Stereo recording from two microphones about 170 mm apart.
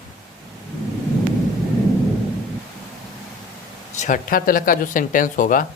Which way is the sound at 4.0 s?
50° left (ahead or behind).